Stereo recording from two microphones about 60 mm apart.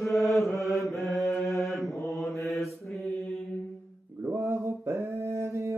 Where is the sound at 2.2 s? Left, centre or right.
Left.